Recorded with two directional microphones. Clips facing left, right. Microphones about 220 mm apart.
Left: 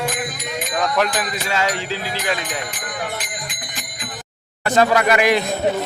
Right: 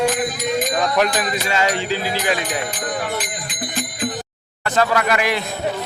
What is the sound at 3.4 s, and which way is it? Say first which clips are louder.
Music: right 8 dB; 35° right (ahead or behind).